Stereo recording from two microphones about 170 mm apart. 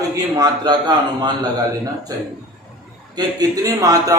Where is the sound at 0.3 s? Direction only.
25° right (ahead or behind).